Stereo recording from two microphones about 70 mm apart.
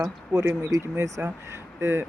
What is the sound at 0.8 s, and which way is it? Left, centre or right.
Speech, right.